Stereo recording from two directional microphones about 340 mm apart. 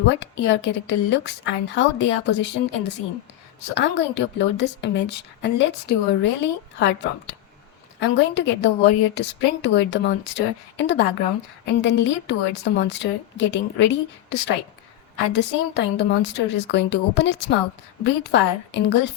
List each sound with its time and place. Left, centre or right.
0.2 s a woman's voice: left